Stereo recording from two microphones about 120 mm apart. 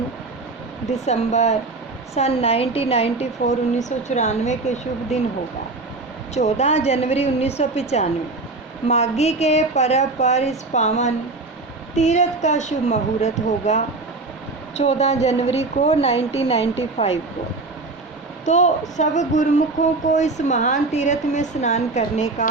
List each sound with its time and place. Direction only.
1.0 s a woman's voice: 70° left (ahead or behind)
2.1 s a woman's voice: 60° left (ahead or behind)
6.3 s a woman's voice: 70° left (ahead or behind)
18.4 s speech: 80° left